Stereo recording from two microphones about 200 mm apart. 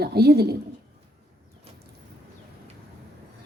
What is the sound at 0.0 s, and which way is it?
Speech, 55° right (ahead or behind).